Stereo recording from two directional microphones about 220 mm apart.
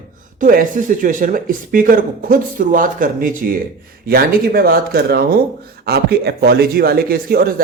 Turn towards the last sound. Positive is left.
turn(degrees=-45)  # may be behind; listen again after turning